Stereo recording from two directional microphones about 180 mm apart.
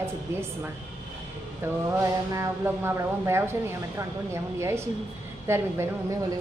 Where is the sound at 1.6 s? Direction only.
15° right (ahead or behind).